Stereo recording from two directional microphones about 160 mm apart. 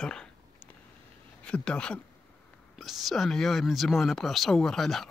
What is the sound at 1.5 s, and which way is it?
Speech, 5° left (ahead or behind).